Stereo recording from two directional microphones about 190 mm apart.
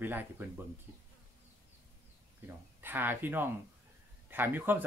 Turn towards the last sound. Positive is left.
turn(degrees=-10)  # may be behind; listen again after turning